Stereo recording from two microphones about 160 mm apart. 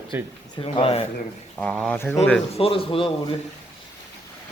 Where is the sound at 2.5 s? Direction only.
35° left (ahead or behind).